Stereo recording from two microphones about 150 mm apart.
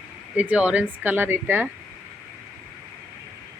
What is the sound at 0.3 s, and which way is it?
Speech, 10° right (ahead or behind).